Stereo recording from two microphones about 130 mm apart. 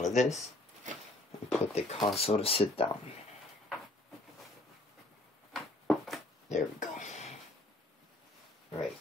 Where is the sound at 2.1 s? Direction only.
50° left (ahead or behind).